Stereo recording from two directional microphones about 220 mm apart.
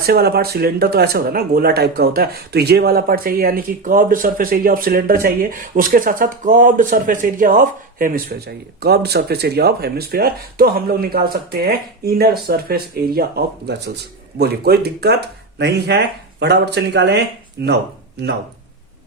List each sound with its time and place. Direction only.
0.0 s speech: 45° right (ahead or behind)